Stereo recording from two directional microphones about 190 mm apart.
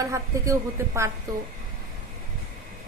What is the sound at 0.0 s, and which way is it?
Speech, 15° right (ahead or behind).